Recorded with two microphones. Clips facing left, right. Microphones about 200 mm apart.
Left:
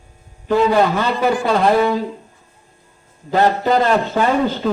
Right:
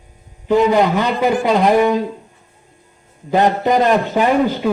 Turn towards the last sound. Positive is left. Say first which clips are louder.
# right 2 dB
turn(degrees=-15)  # may be behind; listen again after turning